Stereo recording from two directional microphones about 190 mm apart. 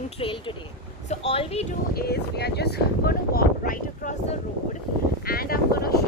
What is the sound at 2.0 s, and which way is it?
Speech, 55° left (ahead or behind).